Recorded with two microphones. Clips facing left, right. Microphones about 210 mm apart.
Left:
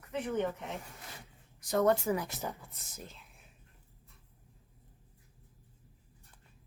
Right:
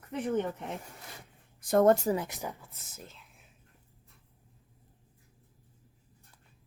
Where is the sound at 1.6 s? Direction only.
50° right (ahead or behind).